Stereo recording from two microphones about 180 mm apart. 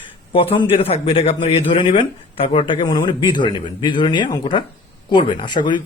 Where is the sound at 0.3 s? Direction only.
30° left (ahead or behind).